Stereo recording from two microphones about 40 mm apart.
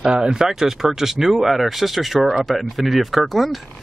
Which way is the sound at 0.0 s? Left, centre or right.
Right.